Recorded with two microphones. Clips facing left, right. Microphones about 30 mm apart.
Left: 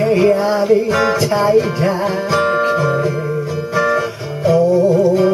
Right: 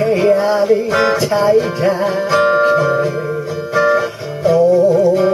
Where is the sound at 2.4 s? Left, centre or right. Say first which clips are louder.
Right 4 dB; centre.